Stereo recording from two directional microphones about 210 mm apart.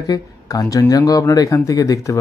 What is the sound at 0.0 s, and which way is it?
Speech, 15° left (ahead or behind).